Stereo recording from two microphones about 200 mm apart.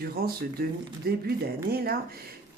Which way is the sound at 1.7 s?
50° right (ahead or behind).